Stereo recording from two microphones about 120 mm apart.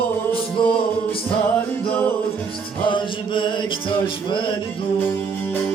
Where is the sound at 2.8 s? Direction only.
45° left (ahead or behind).